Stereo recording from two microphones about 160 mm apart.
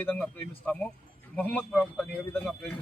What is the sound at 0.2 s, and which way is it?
A man's voice, 5° left (ahead or behind).